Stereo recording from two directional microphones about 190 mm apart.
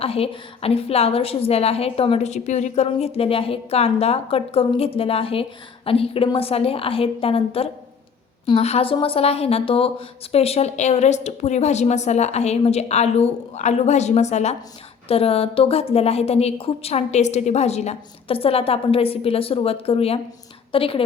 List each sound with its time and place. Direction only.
0.0 s a woman's voice: 30° left (ahead or behind)